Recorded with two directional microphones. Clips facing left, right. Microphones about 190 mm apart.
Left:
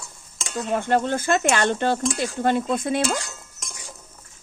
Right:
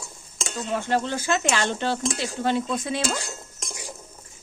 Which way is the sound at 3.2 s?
30° right (ahead or behind).